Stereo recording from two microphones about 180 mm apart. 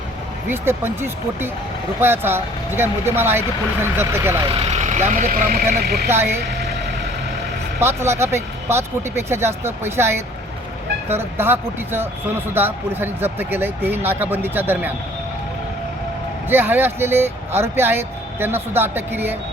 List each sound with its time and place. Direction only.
0.4 s speech: 10° right (ahead or behind)
4.4 s speech: 40° right (ahead or behind); by 6.1 s 60° right (ahead or behind)
7.8 s speech: 15° right (ahead or behind)
16.5 s speech: 10° right (ahead or behind)